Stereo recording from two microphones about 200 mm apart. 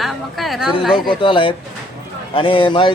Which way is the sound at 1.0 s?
25° left (ahead or behind).